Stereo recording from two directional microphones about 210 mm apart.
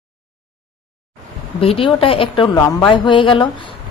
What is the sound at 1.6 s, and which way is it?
A woman's voice, 25° left (ahead or behind).